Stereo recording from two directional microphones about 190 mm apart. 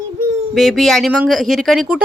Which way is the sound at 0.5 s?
Centre (ahead or behind).